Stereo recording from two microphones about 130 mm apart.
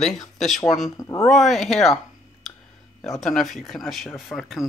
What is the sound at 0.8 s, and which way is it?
Speech, 25° left (ahead or behind).